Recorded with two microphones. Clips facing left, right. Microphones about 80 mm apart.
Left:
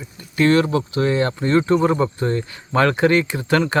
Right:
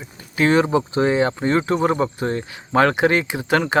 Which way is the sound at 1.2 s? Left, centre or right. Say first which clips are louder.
Left 1 dB; centre.